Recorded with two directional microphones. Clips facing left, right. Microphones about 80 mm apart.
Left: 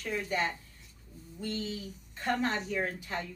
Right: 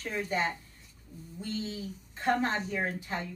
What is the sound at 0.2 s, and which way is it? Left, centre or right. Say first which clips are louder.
Speech: right 3 dB; right.